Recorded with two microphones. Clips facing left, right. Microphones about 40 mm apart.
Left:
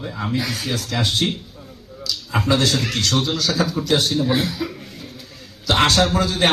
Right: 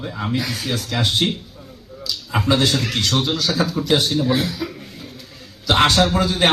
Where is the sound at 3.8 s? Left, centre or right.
Centre.